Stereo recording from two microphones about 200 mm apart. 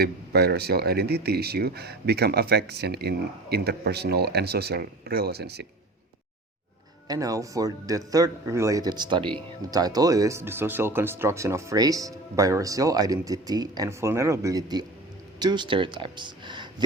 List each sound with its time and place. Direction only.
0.0 s speech: 50° right (ahead or behind)
7.1 s speech: 15° right (ahead or behind)